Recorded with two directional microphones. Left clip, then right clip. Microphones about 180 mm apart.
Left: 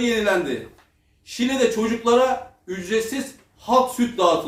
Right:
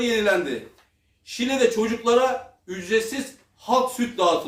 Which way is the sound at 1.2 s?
15° right (ahead or behind).